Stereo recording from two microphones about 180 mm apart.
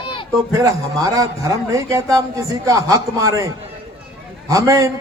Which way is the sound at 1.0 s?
20° right (ahead or behind).